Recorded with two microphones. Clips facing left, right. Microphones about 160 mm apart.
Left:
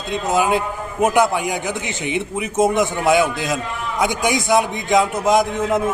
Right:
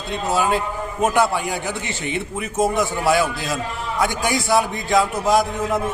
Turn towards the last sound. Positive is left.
turn(degrees=20)  # may be behind; listen again after turning